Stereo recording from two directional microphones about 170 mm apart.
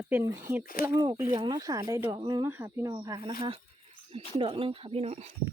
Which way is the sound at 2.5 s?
15° right (ahead or behind).